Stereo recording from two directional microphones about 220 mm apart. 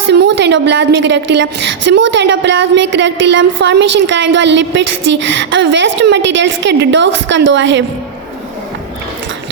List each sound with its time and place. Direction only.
0.1 s a woman's voice: 50° right (ahead or behind)